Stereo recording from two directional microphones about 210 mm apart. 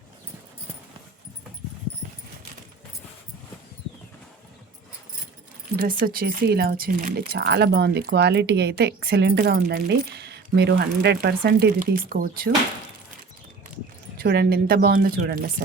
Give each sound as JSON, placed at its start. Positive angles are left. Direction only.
{"t": 5.7, "sound": "speech", "side_deg": -40}
{"t": 14.2, "sound": "speech", "side_deg": -50}